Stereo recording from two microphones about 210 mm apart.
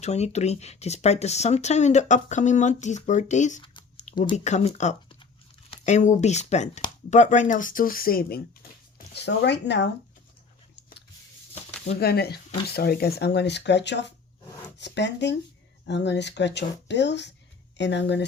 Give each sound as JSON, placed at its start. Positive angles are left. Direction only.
{"t": 0.0, "sound": "speech", "side_deg": 30}
{"t": 11.9, "sound": "speech", "side_deg": 50}